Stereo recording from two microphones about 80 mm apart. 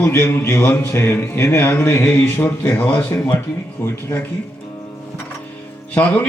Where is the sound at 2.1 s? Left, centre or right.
Left.